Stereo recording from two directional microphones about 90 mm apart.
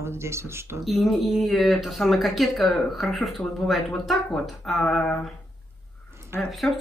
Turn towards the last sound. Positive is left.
turn(degrees=5)  # may be behind; listen again after turning